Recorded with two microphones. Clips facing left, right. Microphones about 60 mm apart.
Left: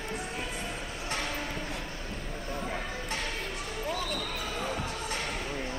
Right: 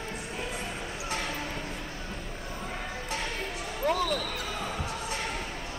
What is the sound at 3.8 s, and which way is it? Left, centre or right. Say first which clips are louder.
Basketball bounce: right 8 dB; right.